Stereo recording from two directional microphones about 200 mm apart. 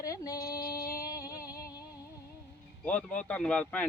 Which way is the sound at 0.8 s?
45° left (ahead or behind).